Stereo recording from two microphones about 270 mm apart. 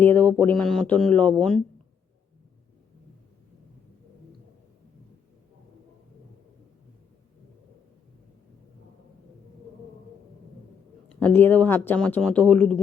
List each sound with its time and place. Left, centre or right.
0.0 s speech: centre
11.1 s speech: centre